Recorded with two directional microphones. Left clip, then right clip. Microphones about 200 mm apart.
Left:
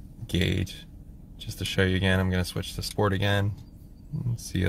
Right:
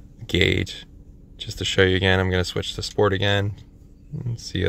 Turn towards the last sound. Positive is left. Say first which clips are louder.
# right 5 dB
turn(degrees=-10)  # may be behind; listen again after turning